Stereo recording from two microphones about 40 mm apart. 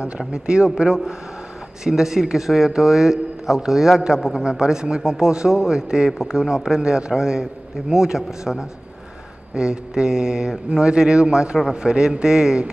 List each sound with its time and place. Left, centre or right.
0.3 s a man's voice: right